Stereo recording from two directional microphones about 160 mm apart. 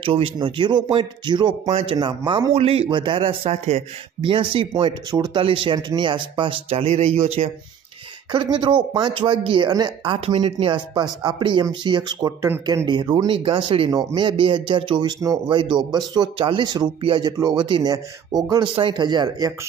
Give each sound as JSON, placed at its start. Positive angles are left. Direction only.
{"t": 0.0, "sound": "a man's voice", "side_deg": -35}